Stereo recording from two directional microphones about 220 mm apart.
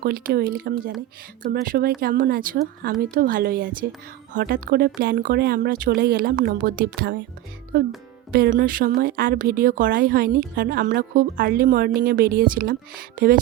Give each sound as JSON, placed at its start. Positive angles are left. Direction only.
{"t": 0.0, "sound": "a woman's voice", "side_deg": -45}
{"t": 8.3, "sound": "a woman's voice", "side_deg": -40}